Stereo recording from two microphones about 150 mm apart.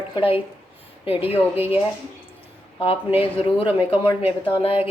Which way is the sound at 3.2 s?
40° left (ahead or behind).